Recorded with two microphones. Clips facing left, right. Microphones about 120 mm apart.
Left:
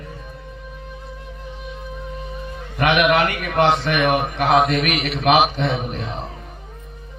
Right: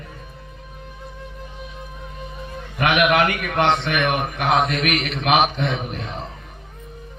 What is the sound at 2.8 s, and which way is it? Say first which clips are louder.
A man's voice: left 1 dB; 35° left (ahead or behind).